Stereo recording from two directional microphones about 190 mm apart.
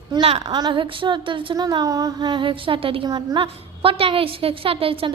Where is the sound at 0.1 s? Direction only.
30° right (ahead or behind).